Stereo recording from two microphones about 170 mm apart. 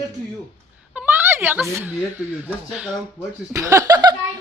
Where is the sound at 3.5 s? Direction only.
15° right (ahead or behind).